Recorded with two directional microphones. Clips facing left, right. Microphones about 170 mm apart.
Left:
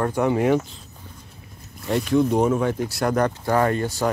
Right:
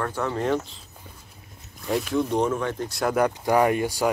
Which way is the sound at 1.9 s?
Centre (ahead or behind).